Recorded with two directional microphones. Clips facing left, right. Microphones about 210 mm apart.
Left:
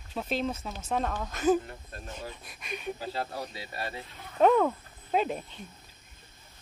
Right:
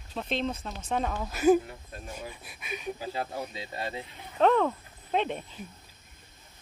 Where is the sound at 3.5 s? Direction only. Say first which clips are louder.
Right 2 dB; 20° right (ahead or behind).